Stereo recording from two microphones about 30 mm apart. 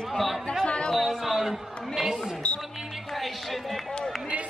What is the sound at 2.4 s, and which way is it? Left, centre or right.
Music, left.